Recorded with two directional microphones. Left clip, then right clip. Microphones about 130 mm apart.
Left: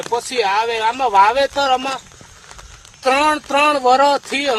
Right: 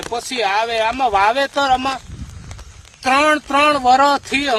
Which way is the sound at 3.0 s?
50° right (ahead or behind).